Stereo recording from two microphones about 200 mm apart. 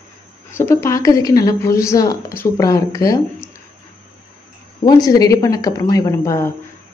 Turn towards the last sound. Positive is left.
turn(degrees=15)  # may be behind; listen again after turning